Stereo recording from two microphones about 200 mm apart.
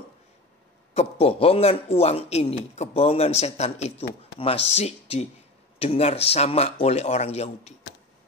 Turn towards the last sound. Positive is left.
turn(degrees=30)  # may be behind; listen again after turning